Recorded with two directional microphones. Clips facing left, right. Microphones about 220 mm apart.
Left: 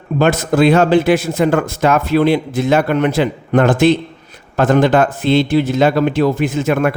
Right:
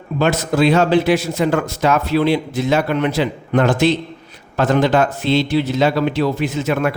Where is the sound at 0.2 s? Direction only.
50° left (ahead or behind).